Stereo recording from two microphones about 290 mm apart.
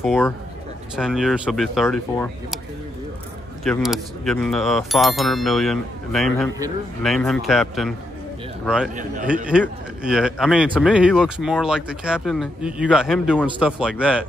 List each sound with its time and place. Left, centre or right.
0.0 s speech: centre
3.6 s speech: centre
8.9 s a man's voice: right
9.5 s speech: centre